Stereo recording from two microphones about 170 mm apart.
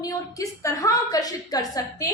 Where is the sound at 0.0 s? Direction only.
20° left (ahead or behind).